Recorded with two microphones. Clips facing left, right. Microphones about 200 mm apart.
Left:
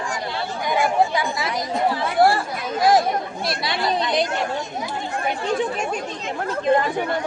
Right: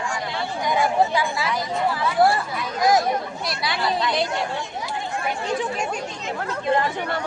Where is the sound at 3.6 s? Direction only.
20° left (ahead or behind).